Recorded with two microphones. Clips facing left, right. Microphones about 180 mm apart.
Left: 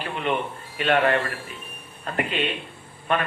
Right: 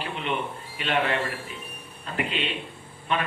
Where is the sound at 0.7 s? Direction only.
50° left (ahead or behind).